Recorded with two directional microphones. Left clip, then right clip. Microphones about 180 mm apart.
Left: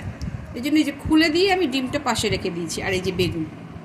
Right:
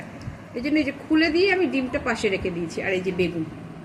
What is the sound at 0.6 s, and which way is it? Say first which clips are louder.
A woman's voice: left 3 dB; 75° left (ahead or behind).